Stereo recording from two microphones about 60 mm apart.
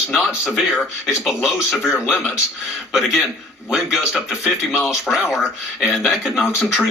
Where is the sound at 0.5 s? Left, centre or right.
Centre.